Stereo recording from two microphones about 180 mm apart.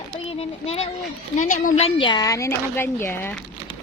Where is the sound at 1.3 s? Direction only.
45° left (ahead or behind).